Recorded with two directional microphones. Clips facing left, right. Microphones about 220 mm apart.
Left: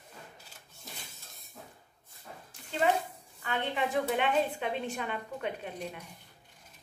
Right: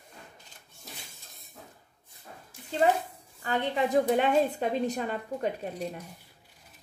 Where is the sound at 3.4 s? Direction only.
40° right (ahead or behind).